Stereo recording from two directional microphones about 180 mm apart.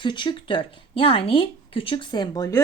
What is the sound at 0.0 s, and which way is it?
Speech, 25° left (ahead or behind).